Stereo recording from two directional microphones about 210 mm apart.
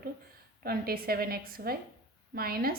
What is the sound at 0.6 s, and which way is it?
A woman's voice, 45° right (ahead or behind).